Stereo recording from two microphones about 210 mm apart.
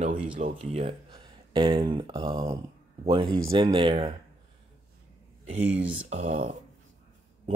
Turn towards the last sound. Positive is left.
turn(degrees=-35)  # may be behind; listen again after turning